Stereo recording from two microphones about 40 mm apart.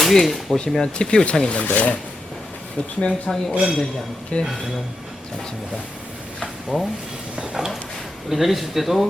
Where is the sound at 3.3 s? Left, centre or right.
Centre.